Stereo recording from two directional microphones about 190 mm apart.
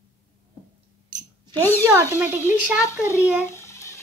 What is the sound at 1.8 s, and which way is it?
Speech, 15° right (ahead or behind).